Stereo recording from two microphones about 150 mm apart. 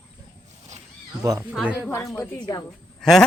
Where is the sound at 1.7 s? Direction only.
10° left (ahead or behind).